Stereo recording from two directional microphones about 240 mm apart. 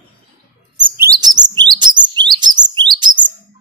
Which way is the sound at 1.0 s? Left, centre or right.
Centre.